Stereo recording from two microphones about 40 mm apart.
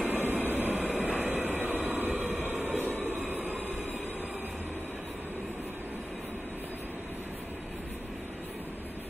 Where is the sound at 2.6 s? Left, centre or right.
Right.